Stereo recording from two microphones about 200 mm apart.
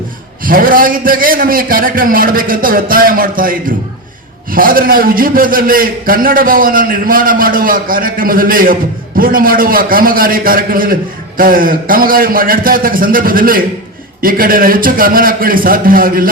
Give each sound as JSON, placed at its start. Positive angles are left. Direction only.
{"t": 0.4, "sound": "a man's voice", "side_deg": -45}